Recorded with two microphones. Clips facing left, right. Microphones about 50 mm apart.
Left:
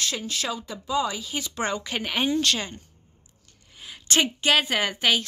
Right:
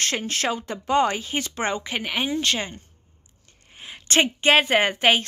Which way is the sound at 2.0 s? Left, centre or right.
Centre.